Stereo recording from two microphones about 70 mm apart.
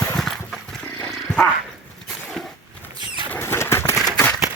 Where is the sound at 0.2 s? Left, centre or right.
Centre.